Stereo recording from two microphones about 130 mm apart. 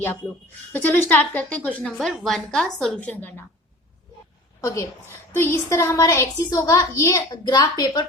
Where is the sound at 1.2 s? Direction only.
15° left (ahead or behind).